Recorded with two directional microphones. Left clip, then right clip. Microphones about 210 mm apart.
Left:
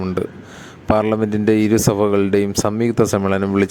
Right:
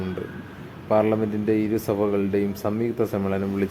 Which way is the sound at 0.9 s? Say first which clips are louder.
Left 2 dB; 40° left (ahead or behind).